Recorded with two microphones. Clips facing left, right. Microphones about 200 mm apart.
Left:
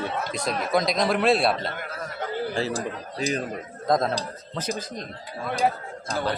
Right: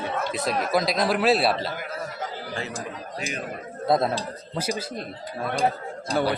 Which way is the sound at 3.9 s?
5° right (ahead or behind).